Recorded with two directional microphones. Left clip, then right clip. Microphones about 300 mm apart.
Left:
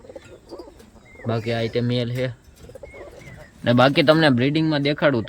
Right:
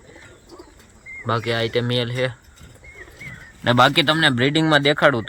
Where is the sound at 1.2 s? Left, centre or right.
Centre.